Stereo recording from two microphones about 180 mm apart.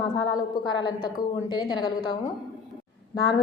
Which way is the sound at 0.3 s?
25° left (ahead or behind).